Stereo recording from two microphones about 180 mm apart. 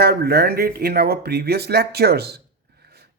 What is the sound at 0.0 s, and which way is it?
Speech, 60° right (ahead or behind).